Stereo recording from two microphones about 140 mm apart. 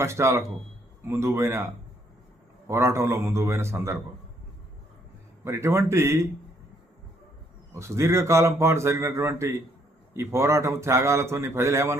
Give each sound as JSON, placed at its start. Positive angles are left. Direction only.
{"t": 0.0, "sound": "a man's voice", "side_deg": -20}
{"t": 2.6, "sound": "a man's voice", "side_deg": -20}
{"t": 5.5, "sound": "a man's voice", "side_deg": -20}
{"t": 7.8, "sound": "a man's voice", "side_deg": -20}